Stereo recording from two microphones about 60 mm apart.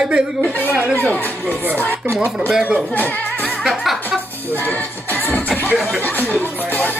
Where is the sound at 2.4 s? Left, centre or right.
Centre.